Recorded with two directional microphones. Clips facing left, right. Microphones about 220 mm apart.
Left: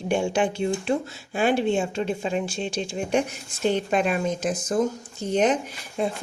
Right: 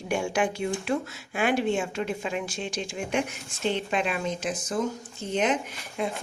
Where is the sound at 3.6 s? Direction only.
45° left (ahead or behind).